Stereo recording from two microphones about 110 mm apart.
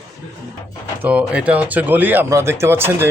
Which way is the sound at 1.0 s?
10° right (ahead or behind).